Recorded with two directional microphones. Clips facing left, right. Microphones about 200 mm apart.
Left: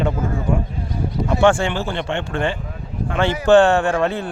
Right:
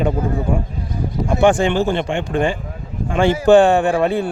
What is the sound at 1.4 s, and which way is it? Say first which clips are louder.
Speech: right 3 dB; 15° right (ahead or behind).